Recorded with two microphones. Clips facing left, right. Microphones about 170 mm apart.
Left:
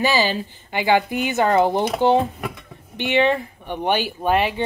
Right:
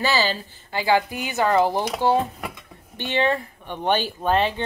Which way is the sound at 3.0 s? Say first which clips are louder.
Left 4 dB; 15° left (ahead or behind).